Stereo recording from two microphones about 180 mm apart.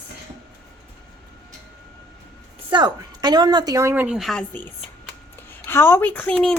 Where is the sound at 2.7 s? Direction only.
25° right (ahead or behind).